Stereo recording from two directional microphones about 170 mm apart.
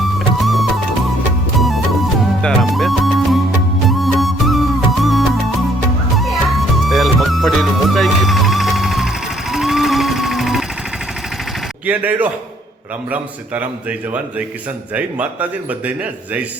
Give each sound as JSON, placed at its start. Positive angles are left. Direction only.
{"t": 0.2, "sound": "music", "side_deg": 0}
{"t": 11.9, "sound": "a man's voice", "side_deg": -10}